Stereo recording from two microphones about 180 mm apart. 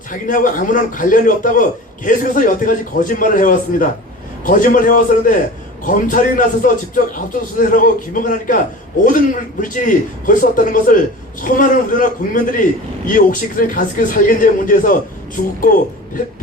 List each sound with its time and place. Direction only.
0.1 s a man's voice: 50° left (ahead or behind)